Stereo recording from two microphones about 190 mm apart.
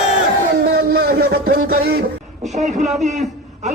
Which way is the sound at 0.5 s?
55° right (ahead or behind).